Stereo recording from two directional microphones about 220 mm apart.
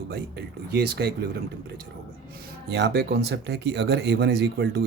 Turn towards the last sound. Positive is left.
turn(degrees=-50)  # may be behind; listen again after turning